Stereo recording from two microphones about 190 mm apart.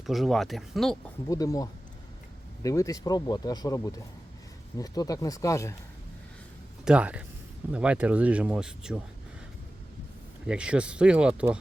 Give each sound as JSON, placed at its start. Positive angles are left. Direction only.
{"t": 0.0, "sound": "speech", "side_deg": 0}
{"t": 1.3, "sound": "speech", "side_deg": 20}
{"t": 6.8, "sound": "speech", "side_deg": -5}
{"t": 10.4, "sound": "speech", "side_deg": -5}